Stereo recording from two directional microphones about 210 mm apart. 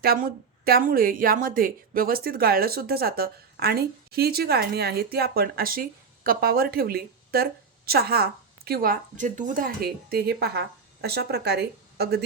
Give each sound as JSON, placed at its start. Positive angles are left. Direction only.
{"t": 0.0, "sound": "speech", "side_deg": -45}